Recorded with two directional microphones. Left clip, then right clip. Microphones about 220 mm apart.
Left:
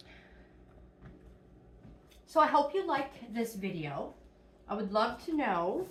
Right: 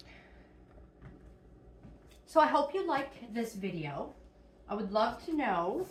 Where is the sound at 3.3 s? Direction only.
Centre (ahead or behind).